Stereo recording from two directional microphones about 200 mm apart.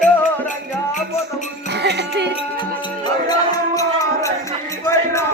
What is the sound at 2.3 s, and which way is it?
Music, 25° left (ahead or behind).